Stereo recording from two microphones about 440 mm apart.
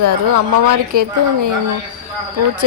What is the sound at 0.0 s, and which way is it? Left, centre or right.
Speech, right.